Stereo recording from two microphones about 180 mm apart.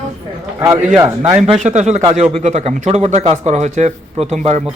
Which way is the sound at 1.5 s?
40° right (ahead or behind).